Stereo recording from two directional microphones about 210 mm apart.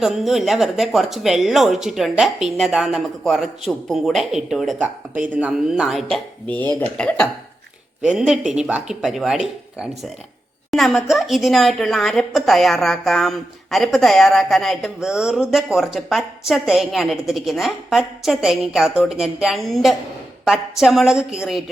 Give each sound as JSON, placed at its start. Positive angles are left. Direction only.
{"t": 0.0, "sound": "a woman's voice", "side_deg": 0}